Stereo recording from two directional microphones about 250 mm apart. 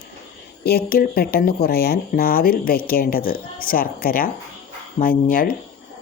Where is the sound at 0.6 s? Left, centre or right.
Left.